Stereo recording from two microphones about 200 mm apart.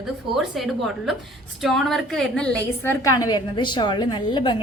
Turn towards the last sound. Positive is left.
turn(degrees=25)  # may be behind; listen again after turning